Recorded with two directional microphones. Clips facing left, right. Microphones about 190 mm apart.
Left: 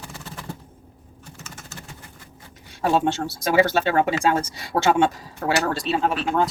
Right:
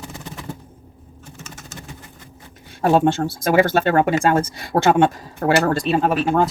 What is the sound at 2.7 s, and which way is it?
Speech, 50° right (ahead or behind).